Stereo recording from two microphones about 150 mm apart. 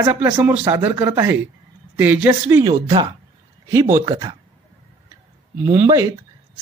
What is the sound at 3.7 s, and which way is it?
Speech, 20° right (ahead or behind).